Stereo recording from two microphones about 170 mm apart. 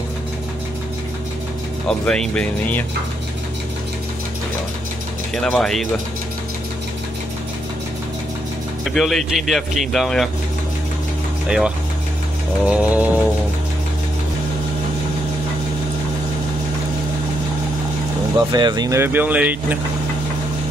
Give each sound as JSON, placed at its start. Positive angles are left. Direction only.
{"t": 1.9, "sound": "a man's voice", "side_deg": 5}
{"t": 5.3, "sound": "a man's voice", "side_deg": 0}
{"t": 8.9, "sound": "a man's voice", "side_deg": 0}
{"t": 11.4, "sound": "a man's voice", "side_deg": -5}
{"t": 18.5, "sound": "speech", "side_deg": -25}